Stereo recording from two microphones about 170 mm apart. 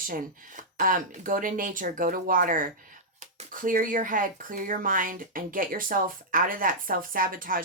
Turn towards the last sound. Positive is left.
turn(degrees=-55)  # may be behind; listen again after turning